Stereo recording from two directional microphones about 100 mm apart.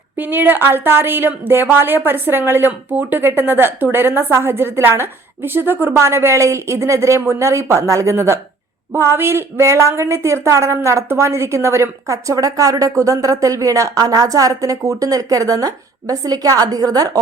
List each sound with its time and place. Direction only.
0.2 s a woman's voice: 20° right (ahead or behind); by 17.1 s 40° right (ahead or behind)